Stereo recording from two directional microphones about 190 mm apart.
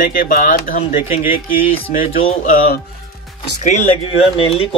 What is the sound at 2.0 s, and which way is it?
Speech, 30° left (ahead or behind).